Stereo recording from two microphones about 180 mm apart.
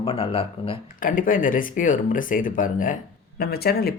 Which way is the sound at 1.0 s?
50° left (ahead or behind).